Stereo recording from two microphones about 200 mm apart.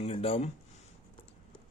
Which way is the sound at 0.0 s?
30° left (ahead or behind).